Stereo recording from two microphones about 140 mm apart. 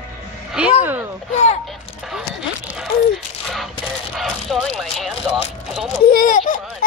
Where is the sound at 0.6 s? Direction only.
10° right (ahead or behind).